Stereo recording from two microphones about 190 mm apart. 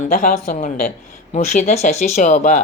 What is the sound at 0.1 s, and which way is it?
Speech, 50° left (ahead or behind).